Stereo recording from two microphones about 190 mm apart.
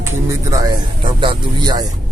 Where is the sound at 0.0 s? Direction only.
15° right (ahead or behind).